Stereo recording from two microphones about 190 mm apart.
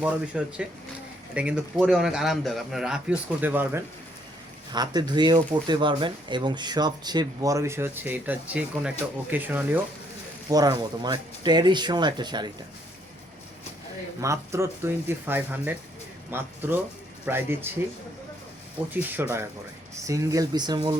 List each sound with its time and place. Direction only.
0.0 s a man's voice: 5° right (ahead or behind)
4.7 s speech: 20° right (ahead or behind)
10.5 s speech: 20° right (ahead or behind)
14.2 s speech: 15° right (ahead or behind)
18.9 s speech: 10° right (ahead or behind)